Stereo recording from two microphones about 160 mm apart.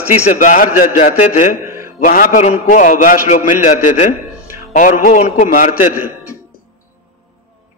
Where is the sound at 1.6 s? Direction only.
15° right (ahead or behind).